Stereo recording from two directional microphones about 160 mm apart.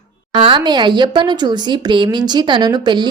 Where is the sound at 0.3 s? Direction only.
30° right (ahead or behind).